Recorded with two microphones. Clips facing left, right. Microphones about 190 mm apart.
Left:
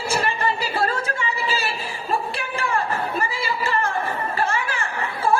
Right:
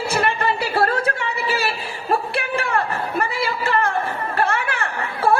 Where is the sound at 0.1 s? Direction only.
60° right (ahead or behind).